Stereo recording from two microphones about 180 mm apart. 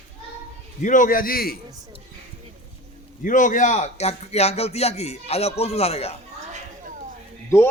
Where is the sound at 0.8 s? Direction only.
45° left (ahead or behind).